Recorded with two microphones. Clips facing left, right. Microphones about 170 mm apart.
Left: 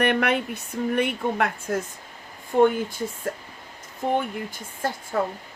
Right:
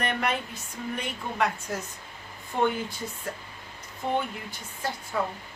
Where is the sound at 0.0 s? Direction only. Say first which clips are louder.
Left 7 dB; 65° left (ahead or behind); by 2.7 s 50° left (ahead or behind).